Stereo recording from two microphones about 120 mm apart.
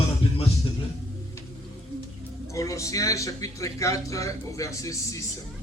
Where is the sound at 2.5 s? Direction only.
25° left (ahead or behind).